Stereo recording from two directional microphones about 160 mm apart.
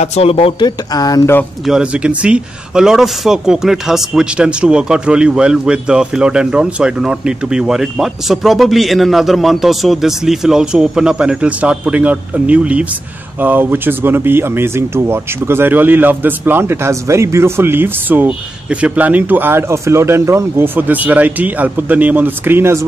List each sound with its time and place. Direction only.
0.0 s speech: 40° left (ahead or behind); by 1.4 s 20° left (ahead or behind)
1.7 s a man's voice: 5° right (ahead or behind)